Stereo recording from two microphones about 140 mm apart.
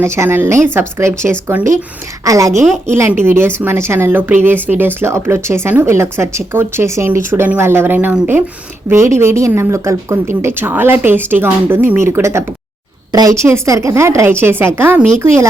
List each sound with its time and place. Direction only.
0.0 s a woman's voice: 20° right (ahead or behind)